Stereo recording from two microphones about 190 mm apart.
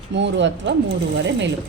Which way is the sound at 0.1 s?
70° right (ahead or behind).